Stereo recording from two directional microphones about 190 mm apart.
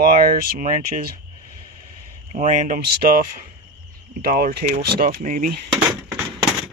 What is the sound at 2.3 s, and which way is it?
Speech, 40° right (ahead or behind).